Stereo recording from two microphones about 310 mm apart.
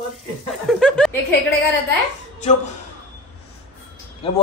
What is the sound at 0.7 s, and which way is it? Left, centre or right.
Chuckle, centre.